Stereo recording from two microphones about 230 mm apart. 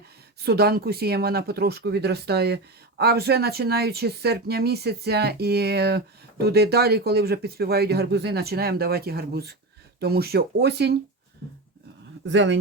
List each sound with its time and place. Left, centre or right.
0.4 s speech: right
12.2 s speech: right